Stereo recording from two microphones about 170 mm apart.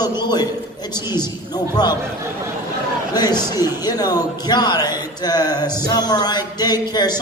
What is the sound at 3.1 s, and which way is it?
A man's voice, 25° left (ahead or behind).